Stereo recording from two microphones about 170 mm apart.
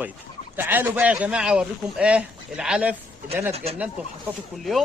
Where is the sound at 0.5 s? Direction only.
10° right (ahead or behind).